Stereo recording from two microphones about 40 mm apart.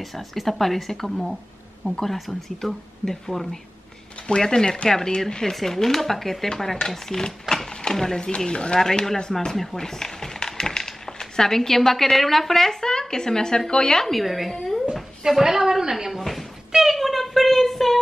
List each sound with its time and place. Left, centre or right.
0.0 s a woman's voice: centre
2.6 s speech: centre
8.5 s speech: left
8.7 s speech: centre
14.1 s a woman's voice: centre
14.5 s speech: centre
15.2 s a sound: centre
16.1 s a sound: centre